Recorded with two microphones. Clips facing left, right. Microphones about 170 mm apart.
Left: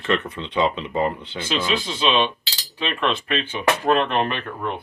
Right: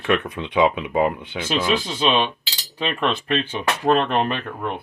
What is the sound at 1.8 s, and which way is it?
Cutlery, 40° right (ahead or behind).